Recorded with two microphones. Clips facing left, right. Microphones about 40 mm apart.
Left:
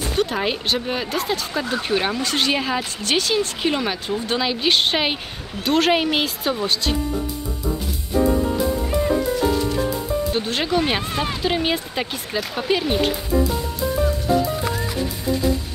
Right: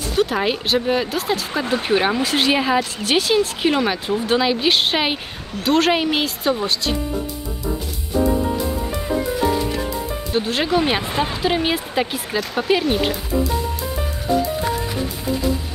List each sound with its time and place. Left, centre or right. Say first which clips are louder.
0.1 s a woman's voice: right 4 dB; centre
1.5 s a woman's voice: right 5 dB; centre
9.8 s music: left 3 dB; centre
11.2 s a woman's voice: right 1 dB; centre